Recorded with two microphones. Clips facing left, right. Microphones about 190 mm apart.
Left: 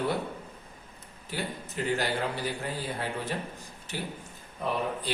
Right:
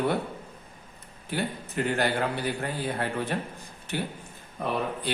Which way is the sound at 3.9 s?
60° right (ahead or behind).